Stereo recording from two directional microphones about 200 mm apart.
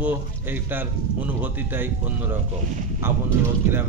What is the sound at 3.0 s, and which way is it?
Speech, 10° right (ahead or behind).